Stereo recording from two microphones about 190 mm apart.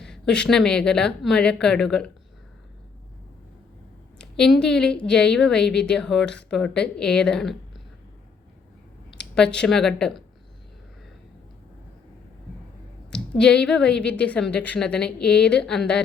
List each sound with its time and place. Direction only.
0.0 s a woman's voice: 5° left (ahead or behind)
4.4 s a woman's voice: 5° left (ahead or behind)
9.0 s speech: 5° left (ahead or behind)
13.1 s a woman's voice: 5° left (ahead or behind)